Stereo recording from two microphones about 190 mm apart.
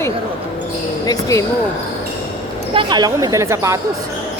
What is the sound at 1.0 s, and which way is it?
Speech, 15° left (ahead or behind).